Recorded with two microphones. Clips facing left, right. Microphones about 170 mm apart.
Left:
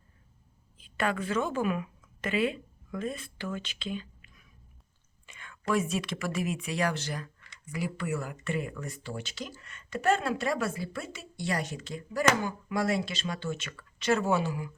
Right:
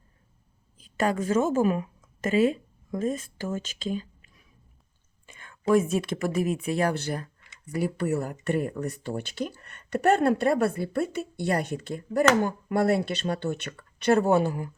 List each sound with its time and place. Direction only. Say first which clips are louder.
0.8 s a woman's voice: right 5 dB; 40° right (ahead or behind)
5.2 s whispering: right 1 dB; 45° right (ahead or behind)
5.9 s speech: right 6 dB; 50° right (ahead or behind)
7.2 s speech: right 2 dB; 35° right (ahead or behind)